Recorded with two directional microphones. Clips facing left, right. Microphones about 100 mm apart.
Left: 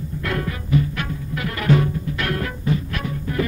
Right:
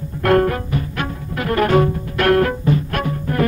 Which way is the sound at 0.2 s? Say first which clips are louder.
Right 13 dB; 55° right (ahead or behind).